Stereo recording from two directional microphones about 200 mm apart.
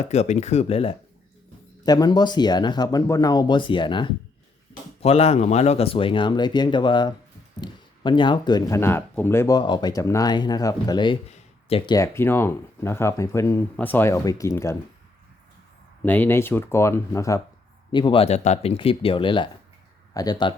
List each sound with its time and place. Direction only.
0.0 s speech: 35° left (ahead or behind)
11.9 s speech: 15° left (ahead or behind)
16.0 s speech: 10° left (ahead or behind)